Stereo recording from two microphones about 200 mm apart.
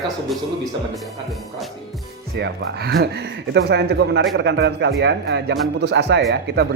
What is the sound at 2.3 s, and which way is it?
Speech, 60° right (ahead or behind).